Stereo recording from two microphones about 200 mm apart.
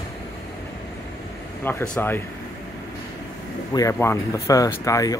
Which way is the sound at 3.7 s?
15° left (ahead or behind).